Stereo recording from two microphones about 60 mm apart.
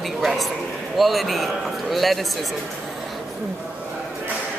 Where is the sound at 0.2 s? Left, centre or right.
Centre.